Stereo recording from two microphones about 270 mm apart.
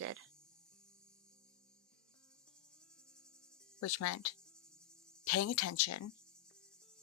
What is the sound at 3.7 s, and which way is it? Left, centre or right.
Speech, left.